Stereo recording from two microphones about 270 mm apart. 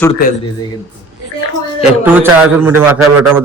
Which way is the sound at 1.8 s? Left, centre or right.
Centre.